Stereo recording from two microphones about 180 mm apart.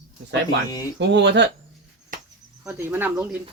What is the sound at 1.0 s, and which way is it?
Speech, 75° right (ahead or behind).